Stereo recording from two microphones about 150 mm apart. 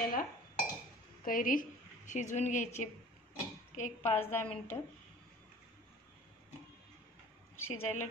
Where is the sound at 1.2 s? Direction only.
65° left (ahead or behind).